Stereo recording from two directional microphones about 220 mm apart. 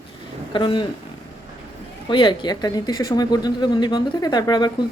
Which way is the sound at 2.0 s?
20° left (ahead or behind).